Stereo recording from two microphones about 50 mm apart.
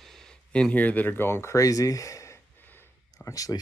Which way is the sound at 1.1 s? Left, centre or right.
Left.